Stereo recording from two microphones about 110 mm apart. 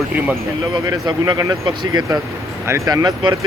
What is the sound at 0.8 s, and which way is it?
Speech, 30° right (ahead or behind).